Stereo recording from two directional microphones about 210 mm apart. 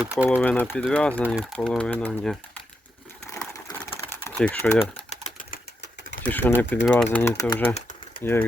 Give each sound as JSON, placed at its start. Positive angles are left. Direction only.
{"t": 0.0, "sound": "speech", "side_deg": -5}
{"t": 0.3, "sound": "speech", "side_deg": 10}
{"t": 3.2, "sound": "typing", "side_deg": 15}
{"t": 4.4, "sound": "speech", "side_deg": 5}
{"t": 5.0, "sound": "typewriter", "side_deg": 35}
{"t": 6.2, "sound": "speech", "side_deg": 10}
{"t": 7.7, "sound": "typing", "side_deg": 30}
{"t": 8.2, "sound": "speech", "side_deg": 10}